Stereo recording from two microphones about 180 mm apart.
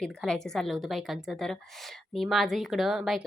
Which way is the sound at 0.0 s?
5° left (ahead or behind).